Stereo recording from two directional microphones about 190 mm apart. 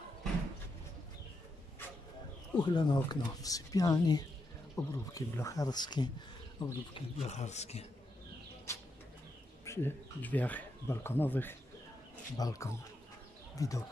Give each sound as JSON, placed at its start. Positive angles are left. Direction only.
{"t": 2.6, "sound": "speech", "side_deg": 25}
{"t": 7.2, "sound": "a man's voice", "side_deg": 35}
{"t": 8.7, "sound": "bird", "side_deg": 15}
{"t": 9.7, "sound": "speech", "side_deg": 10}